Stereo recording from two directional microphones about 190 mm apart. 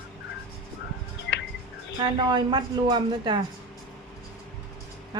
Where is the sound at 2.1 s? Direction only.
25° right (ahead or behind).